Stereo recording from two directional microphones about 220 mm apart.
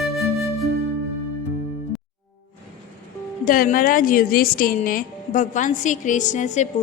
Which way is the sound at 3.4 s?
40° left (ahead or behind).